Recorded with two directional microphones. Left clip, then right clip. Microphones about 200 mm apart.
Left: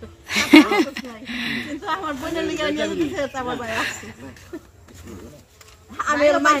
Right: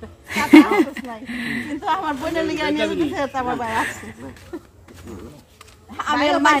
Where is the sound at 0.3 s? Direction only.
15° right (ahead or behind).